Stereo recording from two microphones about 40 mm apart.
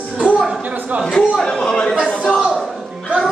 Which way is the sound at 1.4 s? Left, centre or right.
Centre.